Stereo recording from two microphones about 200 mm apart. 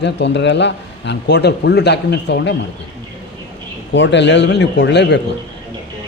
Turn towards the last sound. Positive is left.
turn(degrees=60)  # may be behind; listen again after turning